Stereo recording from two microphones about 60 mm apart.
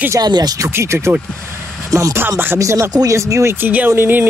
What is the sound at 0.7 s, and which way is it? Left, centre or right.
Speech, right.